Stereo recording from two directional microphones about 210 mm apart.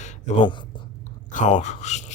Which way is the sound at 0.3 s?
35° left (ahead or behind).